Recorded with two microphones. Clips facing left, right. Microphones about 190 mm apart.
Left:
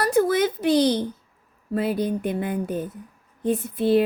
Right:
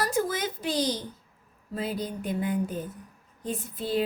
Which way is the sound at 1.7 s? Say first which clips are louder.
Left 8 dB; 65° left (ahead or behind).